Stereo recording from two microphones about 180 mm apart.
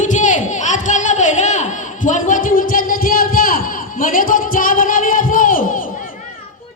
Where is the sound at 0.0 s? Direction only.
45° left (ahead or behind).